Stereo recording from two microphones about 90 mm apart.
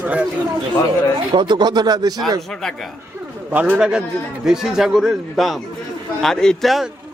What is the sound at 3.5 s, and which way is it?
A man's voice, 15° right (ahead or behind).